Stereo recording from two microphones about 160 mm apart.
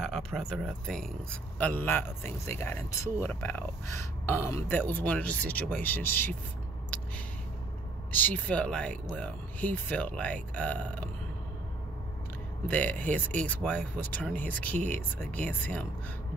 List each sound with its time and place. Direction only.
0.0 s speech: centre (ahead or behind)
8.1 s speech: 10° left (ahead or behind)
12.6 s speech: 10° left (ahead or behind)